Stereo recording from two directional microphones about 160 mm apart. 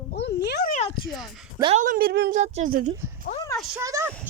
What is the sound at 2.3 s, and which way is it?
Speech, 50° right (ahead or behind).